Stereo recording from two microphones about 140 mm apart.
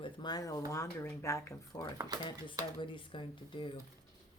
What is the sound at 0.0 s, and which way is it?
Speech, 30° left (ahead or behind).